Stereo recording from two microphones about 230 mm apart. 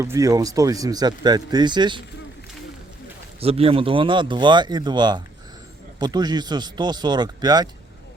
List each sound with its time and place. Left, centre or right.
0.0 s speech: centre
3.4 s speech: right